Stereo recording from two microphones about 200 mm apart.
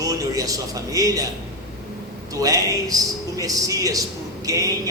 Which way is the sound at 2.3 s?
15° right (ahead or behind).